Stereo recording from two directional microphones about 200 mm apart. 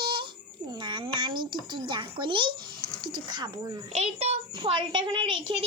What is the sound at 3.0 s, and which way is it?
Speech, 20° right (ahead or behind).